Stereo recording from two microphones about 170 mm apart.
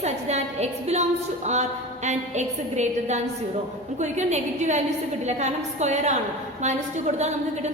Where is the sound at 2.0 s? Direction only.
45° right (ahead or behind).